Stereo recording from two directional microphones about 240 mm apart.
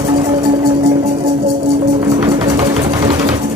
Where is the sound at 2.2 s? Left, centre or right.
Centre.